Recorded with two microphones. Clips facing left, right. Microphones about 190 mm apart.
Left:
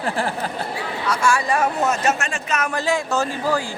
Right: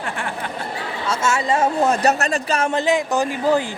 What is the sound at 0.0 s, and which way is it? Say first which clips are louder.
Speech: left 4 dB; 35° left (ahead or behind).